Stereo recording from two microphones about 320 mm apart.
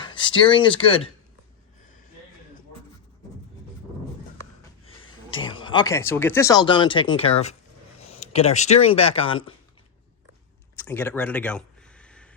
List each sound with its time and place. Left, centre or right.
0.0 s speech: centre
5.5 s speech: centre
10.8 s a sound: centre